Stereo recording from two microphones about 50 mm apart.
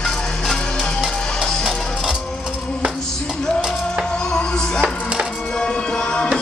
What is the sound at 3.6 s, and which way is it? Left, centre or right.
Music, centre.